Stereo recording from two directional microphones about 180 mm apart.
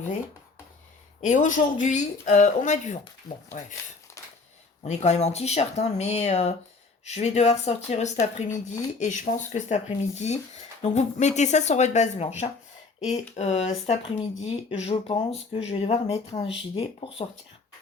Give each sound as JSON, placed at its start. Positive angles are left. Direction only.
{"t": 1.2, "sound": "speech", "side_deg": 45}
{"t": 4.8, "sound": "speech", "side_deg": 40}